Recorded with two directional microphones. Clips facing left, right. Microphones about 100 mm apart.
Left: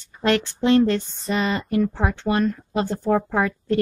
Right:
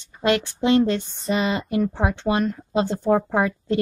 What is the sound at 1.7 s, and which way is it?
Speech, 15° right (ahead or behind).